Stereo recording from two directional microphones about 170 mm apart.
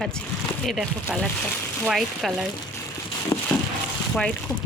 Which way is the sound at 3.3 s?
20° left (ahead or behind).